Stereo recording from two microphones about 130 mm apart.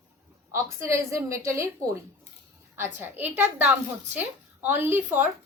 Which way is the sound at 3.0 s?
10° right (ahead or behind).